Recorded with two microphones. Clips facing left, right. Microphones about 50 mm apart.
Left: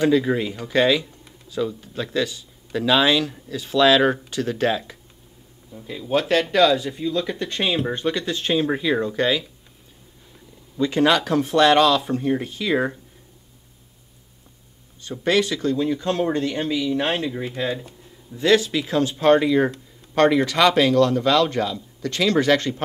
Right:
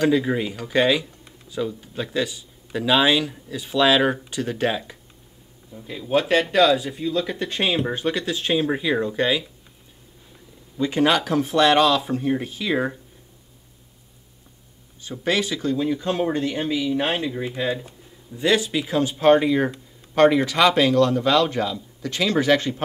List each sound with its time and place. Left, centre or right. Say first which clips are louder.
0.0 s speech: left 1 dB; centre
5.7 s speech: even; centre
10.8 s speech: left 1 dB; centre
12.7 s speech: left 2 dB; centre
15.0 s speech: left 3 dB; centre